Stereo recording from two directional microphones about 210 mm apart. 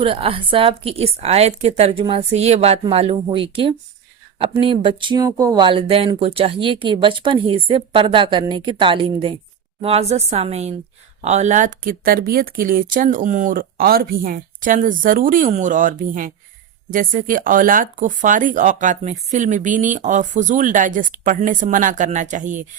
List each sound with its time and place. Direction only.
0.0 s a woman's voice: 25° right (ahead or behind)